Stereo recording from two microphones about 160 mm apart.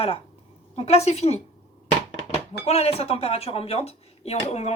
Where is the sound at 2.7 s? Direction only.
40° left (ahead or behind).